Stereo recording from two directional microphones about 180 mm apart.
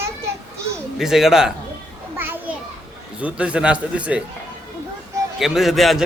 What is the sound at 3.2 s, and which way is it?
Speech, 5° right (ahead or behind).